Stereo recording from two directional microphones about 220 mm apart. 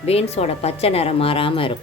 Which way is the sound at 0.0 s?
30° left (ahead or behind).